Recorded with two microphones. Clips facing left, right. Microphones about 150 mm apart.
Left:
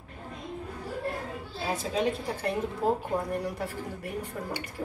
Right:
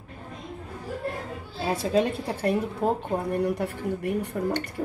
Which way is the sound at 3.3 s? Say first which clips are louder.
Right 6 dB; 60° right (ahead or behind).